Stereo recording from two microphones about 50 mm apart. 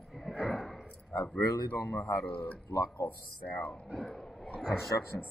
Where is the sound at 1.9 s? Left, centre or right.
Left.